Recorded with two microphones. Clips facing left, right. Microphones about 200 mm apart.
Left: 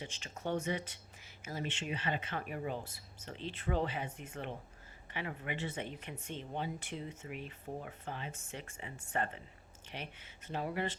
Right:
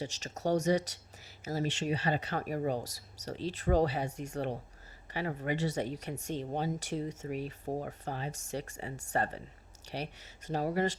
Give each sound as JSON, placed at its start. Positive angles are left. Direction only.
{"t": 0.0, "sound": "speech", "side_deg": -40}